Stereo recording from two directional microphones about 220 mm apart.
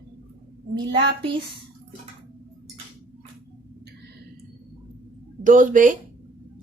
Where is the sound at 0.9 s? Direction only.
25° right (ahead or behind).